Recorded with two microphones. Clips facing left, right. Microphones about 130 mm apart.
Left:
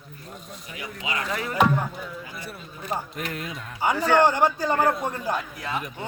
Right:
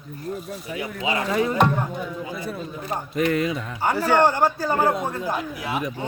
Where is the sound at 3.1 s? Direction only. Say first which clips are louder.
Right 11 dB; 90° right.